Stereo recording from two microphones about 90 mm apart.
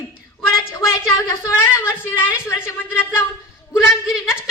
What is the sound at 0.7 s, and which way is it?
Speech, 30° left (ahead or behind).